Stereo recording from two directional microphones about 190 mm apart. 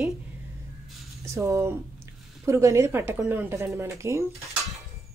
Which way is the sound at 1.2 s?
15° right (ahead or behind).